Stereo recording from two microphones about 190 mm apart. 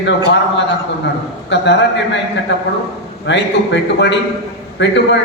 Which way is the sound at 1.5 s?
65° left (ahead or behind).